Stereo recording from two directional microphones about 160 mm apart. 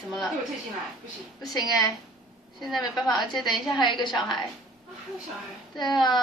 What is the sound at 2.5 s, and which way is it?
A woman's voice, centre (ahead or behind).